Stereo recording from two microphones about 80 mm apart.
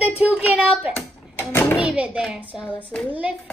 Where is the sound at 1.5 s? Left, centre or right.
Left.